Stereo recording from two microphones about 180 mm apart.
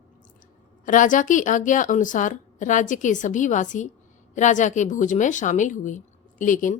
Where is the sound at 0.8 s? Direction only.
45° left (ahead or behind).